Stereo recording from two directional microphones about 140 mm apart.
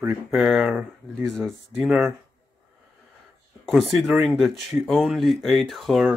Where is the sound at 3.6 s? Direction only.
Centre (ahead or behind).